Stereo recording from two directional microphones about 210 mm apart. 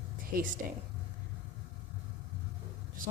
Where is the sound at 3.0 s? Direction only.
40° right (ahead or behind).